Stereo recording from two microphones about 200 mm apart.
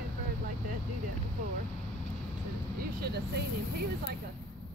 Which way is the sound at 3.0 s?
55° right (ahead or behind).